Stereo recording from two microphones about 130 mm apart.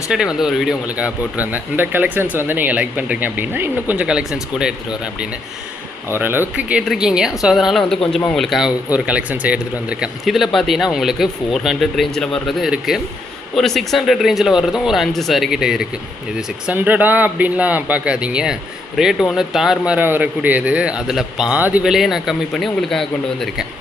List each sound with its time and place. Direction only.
0.3 s speech: 5° right (ahead or behind)
6.1 s speech: 15° right (ahead or behind); by 23.6 s centre (ahead or behind)